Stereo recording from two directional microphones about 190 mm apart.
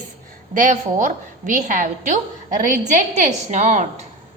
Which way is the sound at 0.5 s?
40° right (ahead or behind).